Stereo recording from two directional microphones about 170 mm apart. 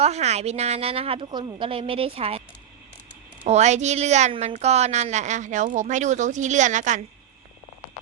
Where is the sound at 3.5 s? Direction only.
40° right (ahead or behind).